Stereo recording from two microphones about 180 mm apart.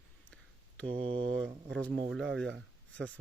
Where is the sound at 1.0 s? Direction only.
30° right (ahead or behind).